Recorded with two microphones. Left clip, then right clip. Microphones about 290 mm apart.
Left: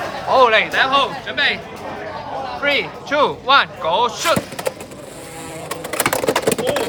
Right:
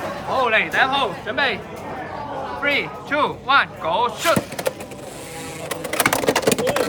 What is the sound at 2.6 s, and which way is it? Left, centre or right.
Speech, centre.